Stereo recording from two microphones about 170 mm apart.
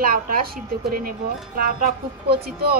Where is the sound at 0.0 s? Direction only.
55° right (ahead or behind).